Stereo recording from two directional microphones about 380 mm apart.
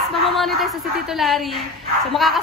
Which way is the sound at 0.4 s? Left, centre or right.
Centre.